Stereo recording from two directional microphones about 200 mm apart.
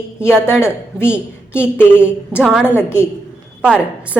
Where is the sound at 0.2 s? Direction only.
10° left (ahead or behind).